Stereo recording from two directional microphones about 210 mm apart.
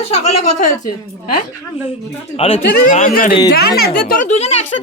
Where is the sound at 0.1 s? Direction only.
30° left (ahead or behind).